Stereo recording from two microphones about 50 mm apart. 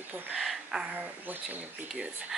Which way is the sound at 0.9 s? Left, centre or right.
Right.